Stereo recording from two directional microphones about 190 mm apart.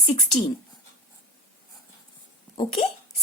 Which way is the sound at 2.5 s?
25° left (ahead or behind).